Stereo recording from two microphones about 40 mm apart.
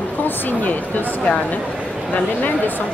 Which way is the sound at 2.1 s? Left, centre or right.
Left.